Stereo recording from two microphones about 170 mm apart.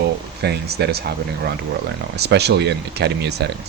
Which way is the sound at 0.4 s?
75° right (ahead or behind).